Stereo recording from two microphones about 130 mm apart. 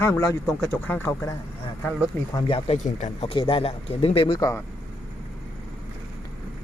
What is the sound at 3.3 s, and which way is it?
Speech, 45° left (ahead or behind).